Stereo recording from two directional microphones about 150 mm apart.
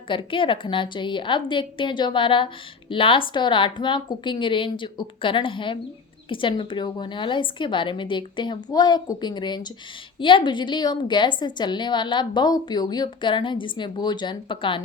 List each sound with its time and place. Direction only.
0.1 s a woman's voice: 35° left (ahead or behind)